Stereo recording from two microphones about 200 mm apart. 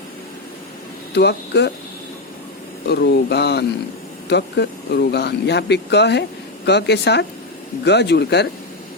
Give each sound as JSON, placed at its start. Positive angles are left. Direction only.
{"t": 1.1, "sound": "speech", "side_deg": 55}
{"t": 2.9, "sound": "speech", "side_deg": 55}